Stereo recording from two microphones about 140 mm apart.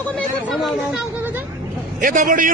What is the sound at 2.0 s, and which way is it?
Speech, 70° right (ahead or behind).